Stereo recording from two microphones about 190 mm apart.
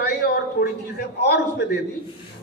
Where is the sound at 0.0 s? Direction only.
55° left (ahead or behind).